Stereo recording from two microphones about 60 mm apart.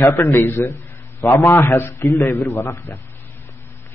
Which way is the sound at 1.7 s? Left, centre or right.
Left.